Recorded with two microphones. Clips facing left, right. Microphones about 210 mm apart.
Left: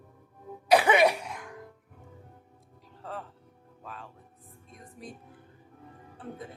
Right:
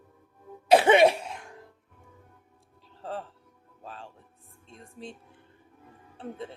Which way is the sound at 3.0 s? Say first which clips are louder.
Right 4 dB; 30° right (ahead or behind).